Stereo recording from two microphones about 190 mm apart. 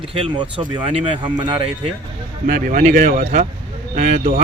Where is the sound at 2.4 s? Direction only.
45° right (ahead or behind).